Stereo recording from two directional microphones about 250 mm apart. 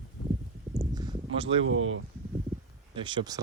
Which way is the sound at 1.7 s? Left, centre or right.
Right.